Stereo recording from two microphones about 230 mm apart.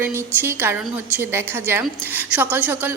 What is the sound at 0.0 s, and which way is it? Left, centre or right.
A woman's voice, centre.